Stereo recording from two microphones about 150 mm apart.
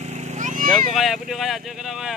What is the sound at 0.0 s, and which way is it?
Cat, 50° right (ahead or behind).